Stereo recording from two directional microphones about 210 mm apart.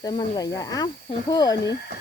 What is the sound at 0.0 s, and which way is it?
Speech, 20° left (ahead or behind).